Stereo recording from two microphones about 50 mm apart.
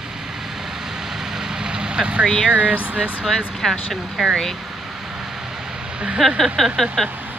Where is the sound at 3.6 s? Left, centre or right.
Centre.